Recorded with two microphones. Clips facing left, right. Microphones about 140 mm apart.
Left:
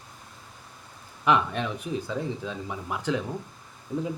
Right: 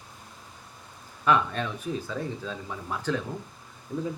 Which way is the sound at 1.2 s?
15° left (ahead or behind).